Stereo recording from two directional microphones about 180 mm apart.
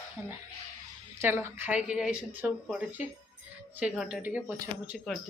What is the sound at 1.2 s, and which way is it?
Speech, 10° right (ahead or behind).